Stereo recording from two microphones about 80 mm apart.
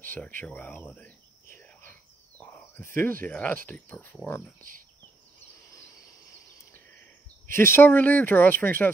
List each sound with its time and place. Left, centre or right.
0.1 s speech: left
1.6 s whispering: left
2.8 s speech: left
7.5 s speech: left